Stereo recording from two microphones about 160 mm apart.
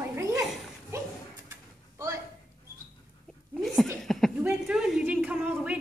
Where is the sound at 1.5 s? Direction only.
20° right (ahead or behind).